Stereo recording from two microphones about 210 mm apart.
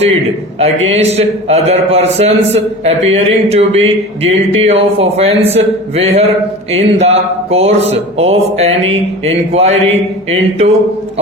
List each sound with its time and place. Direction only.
0.9 s a man's voice: 30° right (ahead or behind)